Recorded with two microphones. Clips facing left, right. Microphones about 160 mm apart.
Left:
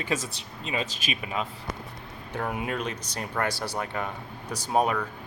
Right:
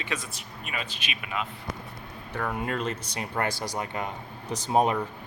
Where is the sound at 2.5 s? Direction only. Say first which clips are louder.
Right 1 dB; 5° left (ahead or behind).